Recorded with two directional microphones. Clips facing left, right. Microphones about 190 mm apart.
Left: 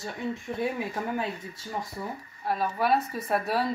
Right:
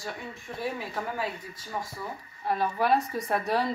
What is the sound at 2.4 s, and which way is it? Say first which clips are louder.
Speech: even; centre (ahead or behind).